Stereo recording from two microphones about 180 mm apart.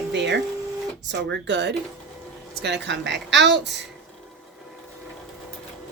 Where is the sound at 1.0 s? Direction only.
75° right (ahead or behind).